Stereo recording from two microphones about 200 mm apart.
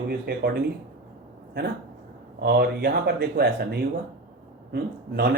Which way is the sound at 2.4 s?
50° right (ahead or behind).